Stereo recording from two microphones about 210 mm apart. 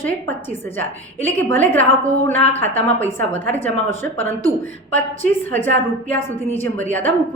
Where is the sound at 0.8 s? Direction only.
10° left (ahead or behind).